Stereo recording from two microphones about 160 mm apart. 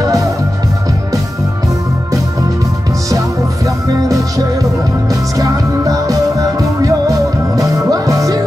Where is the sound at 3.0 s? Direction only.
20° right (ahead or behind).